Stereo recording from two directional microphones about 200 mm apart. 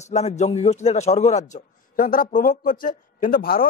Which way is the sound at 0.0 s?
35° left (ahead or behind).